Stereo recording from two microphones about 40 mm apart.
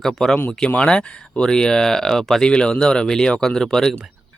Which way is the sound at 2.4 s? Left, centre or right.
Left.